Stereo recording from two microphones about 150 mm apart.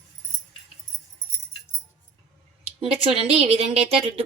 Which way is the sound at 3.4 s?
45° right (ahead or behind).